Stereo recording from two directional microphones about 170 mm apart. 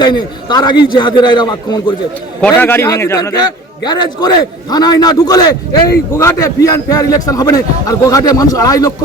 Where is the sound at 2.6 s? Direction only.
15° left (ahead or behind).